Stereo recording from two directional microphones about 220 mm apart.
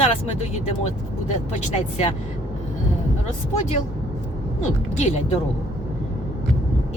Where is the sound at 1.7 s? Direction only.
30° left (ahead or behind).